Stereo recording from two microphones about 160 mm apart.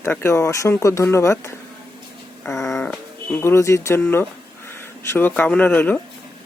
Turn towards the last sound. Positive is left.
turn(degrees=10)  # may be behind; listen again after turning